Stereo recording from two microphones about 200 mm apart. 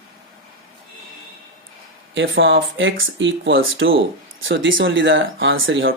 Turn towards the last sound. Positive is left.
turn(degrees=-75)  # may be behind; listen again after turning